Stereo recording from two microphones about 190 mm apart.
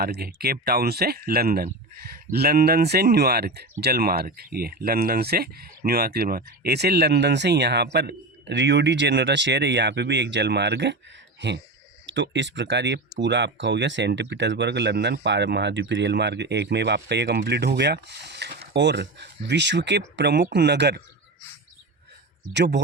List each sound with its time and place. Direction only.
0.0 s speech: 55° right (ahead or behind)
22.5 s speech: 65° right (ahead or behind)